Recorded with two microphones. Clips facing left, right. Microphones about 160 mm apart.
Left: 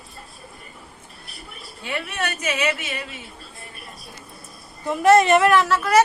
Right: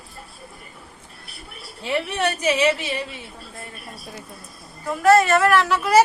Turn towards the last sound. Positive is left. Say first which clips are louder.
# even
turn(degrees=-10)  # may be behind; listen again after turning